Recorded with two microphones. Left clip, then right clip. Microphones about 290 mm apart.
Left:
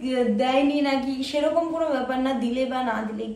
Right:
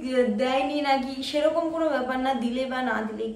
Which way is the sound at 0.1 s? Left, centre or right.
Centre.